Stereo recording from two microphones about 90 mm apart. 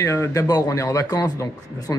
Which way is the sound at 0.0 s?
30° left (ahead or behind).